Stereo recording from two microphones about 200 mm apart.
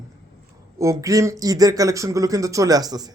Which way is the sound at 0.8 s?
15° right (ahead or behind).